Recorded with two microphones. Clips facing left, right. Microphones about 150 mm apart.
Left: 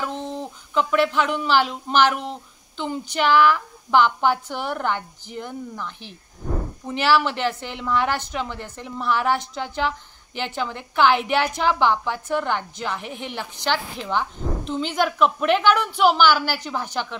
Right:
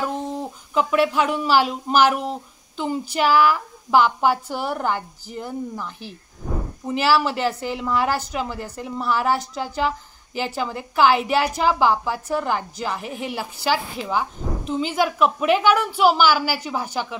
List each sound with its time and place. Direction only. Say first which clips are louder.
0.0 s a woman's voice: right 3 dB; 5° right (ahead or behind)